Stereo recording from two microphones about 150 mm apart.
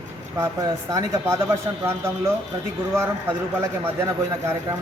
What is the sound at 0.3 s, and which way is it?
A man's voice, 20° right (ahead or behind).